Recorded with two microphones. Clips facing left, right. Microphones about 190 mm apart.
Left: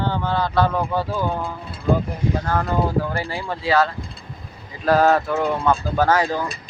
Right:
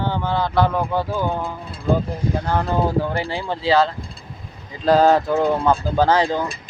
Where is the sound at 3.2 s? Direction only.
20° right (ahead or behind).